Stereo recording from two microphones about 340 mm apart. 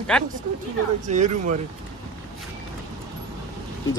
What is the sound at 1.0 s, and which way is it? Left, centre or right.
Speech, right.